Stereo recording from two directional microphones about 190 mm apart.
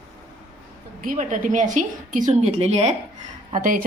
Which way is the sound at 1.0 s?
45° right (ahead or behind).